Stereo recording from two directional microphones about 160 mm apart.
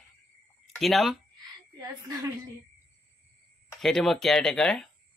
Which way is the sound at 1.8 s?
25° right (ahead or behind).